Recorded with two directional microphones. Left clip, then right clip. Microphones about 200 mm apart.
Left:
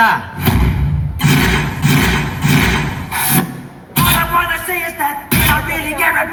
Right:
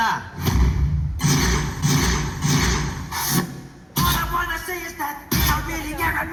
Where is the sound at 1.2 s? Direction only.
35° left (ahead or behind).